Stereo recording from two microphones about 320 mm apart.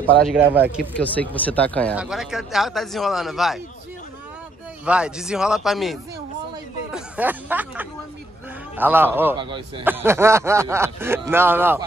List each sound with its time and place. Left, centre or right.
0.0 s speech: centre
4.8 s a man's voice: centre